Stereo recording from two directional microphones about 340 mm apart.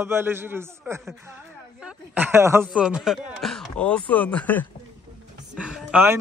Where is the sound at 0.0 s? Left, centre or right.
Centre.